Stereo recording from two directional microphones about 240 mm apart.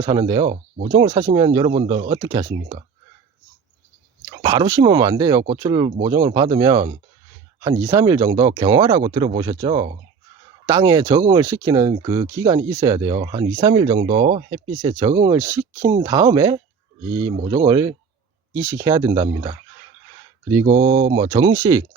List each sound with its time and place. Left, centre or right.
0.0 s speech: centre
4.4 s speech: centre
20.7 s speech: right
21.1 s speech: centre